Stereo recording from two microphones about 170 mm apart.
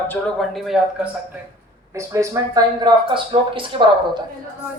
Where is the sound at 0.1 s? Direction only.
Centre (ahead or behind).